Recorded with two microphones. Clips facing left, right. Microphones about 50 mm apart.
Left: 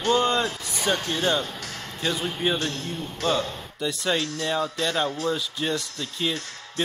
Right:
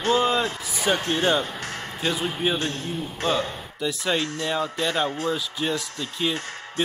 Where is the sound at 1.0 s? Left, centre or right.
Right.